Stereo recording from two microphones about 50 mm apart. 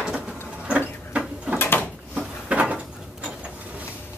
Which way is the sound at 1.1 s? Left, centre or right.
Right.